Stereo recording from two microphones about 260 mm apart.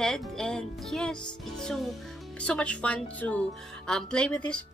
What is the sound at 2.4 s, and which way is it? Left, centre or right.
A woman's voice, centre.